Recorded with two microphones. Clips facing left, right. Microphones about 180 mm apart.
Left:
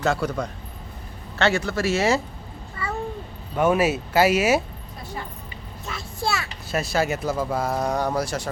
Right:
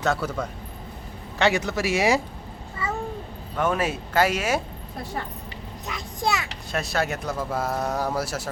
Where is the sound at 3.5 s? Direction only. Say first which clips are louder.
Left 5 dB; 10° left (ahead or behind).